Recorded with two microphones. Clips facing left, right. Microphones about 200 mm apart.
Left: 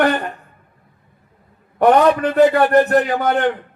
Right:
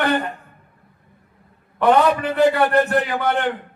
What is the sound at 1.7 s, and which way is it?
A man's voice, 45° left (ahead or behind).